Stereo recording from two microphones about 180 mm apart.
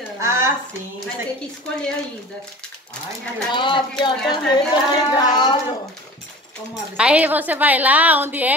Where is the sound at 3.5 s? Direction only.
25° left (ahead or behind).